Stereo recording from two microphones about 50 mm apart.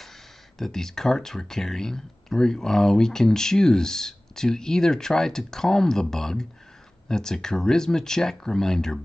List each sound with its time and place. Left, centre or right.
0.6 s speech: centre